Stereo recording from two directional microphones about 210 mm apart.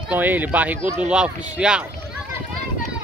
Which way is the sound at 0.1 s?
10° right (ahead or behind).